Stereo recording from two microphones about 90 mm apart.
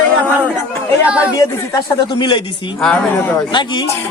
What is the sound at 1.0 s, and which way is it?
Speech, 15° right (ahead or behind).